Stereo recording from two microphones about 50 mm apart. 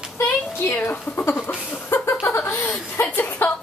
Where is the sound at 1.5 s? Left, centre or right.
Left.